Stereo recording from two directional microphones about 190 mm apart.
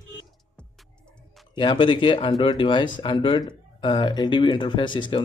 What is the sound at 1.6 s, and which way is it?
Speech, 25° left (ahead or behind).